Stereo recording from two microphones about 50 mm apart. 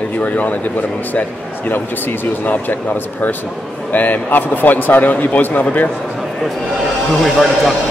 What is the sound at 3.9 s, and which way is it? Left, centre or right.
A man's voice, left.